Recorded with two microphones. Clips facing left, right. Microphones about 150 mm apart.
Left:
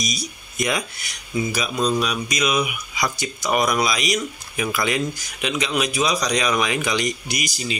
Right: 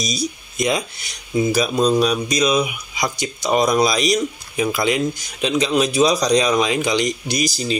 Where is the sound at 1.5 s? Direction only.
35° right (ahead or behind).